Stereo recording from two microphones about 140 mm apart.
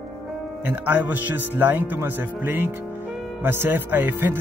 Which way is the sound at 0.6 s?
15° right (ahead or behind).